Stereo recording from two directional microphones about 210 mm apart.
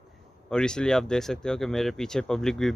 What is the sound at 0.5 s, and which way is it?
Speech, 5° left (ahead or behind).